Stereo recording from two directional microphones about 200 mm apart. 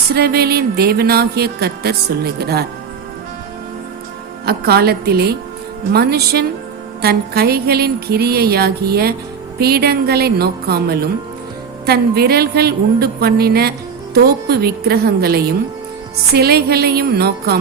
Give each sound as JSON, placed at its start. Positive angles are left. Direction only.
{"t": 0.1, "sound": "a woman's voice", "side_deg": -50}
{"t": 4.4, "sound": "a woman's voice", "side_deg": -50}